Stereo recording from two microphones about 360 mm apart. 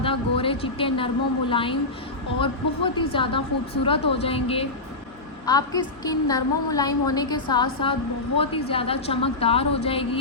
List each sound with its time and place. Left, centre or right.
0.0 s a woman's voice: centre